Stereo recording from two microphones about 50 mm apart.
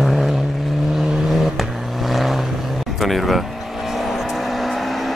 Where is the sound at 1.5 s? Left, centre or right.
Centre.